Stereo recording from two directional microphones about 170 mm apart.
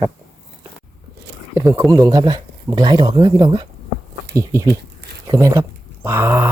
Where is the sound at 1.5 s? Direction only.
15° right (ahead or behind).